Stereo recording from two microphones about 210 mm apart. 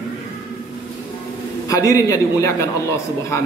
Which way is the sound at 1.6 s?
15° left (ahead or behind).